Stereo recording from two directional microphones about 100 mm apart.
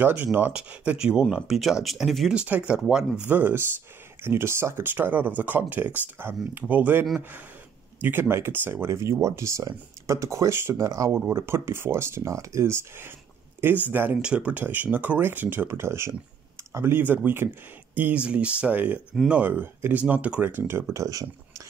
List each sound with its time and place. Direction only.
0.0 s speech: 15° right (ahead or behind)
2.3 s speech: 15° right (ahead or behind)
3.3 s speech: 20° right (ahead or behind)
19.4 s speech: 20° right (ahead or behind); by 21.6 s 35° right (ahead or behind)